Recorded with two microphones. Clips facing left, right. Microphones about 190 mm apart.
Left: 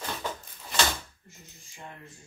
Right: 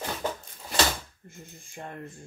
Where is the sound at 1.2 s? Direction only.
55° right (ahead or behind).